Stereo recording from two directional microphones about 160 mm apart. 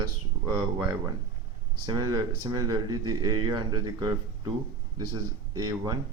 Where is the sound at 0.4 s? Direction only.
20° right (ahead or behind).